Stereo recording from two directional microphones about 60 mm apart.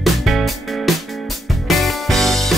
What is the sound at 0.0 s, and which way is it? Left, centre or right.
Music, centre.